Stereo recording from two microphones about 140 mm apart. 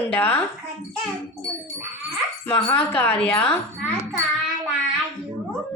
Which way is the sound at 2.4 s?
15° left (ahead or behind).